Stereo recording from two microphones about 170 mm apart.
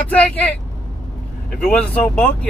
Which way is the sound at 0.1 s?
5° left (ahead or behind).